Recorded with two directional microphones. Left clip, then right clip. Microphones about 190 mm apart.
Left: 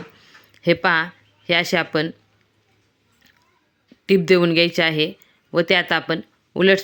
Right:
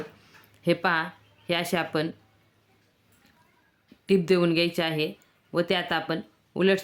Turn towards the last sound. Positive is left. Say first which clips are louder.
# left 8 dB
turn(degrees=25)  # may be behind; listen again after turning